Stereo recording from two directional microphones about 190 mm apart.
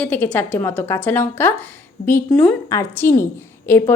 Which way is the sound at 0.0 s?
10° left (ahead or behind).